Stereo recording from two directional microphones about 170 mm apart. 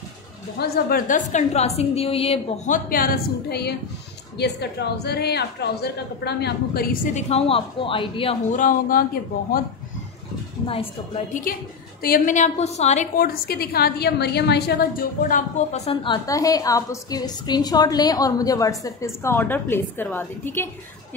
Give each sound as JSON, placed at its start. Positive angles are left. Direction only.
{"t": 0.6, "sound": "a woman's voice", "side_deg": 65}
{"t": 7.2, "sound": "a woman's voice", "side_deg": 35}
{"t": 8.5, "sound": "a woman's voice", "side_deg": 50}
{"t": 10.7, "sound": "a woman's voice", "side_deg": 35}
{"t": 12.0, "sound": "a woman's voice", "side_deg": 55}
{"t": 13.2, "sound": "a woman's voice", "side_deg": 65}